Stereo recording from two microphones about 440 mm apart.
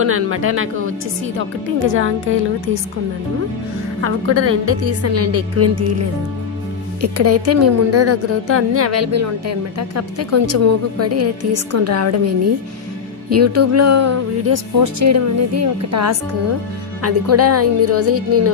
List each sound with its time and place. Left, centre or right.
0.0 s speech: right
4.0 s a woman's voice: right
7.0 s a woman's voice: right
13.3 s a woman's voice: right